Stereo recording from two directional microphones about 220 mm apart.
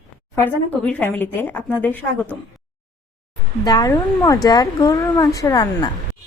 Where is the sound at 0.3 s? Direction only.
5° left (ahead or behind).